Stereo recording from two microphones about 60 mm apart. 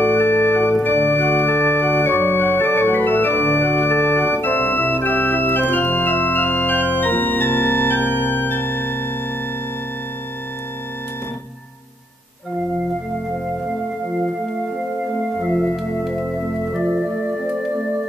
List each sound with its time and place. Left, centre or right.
0.0 s organ: left
15.7 s music: centre